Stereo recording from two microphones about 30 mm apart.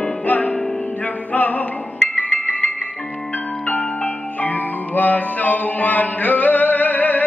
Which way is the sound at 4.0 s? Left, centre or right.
Left.